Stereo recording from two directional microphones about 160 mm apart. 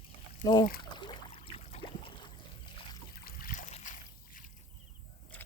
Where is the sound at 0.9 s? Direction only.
30° left (ahead or behind).